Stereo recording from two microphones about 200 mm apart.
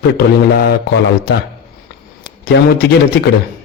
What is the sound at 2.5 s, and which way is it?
Speech, 60° left (ahead or behind).